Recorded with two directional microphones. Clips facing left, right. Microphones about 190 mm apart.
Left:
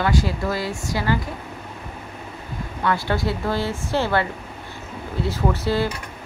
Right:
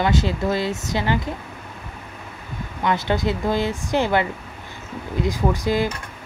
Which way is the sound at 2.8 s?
20° right (ahead or behind).